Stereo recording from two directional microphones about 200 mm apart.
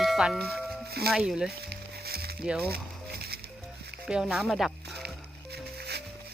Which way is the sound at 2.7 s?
50° right (ahead or behind).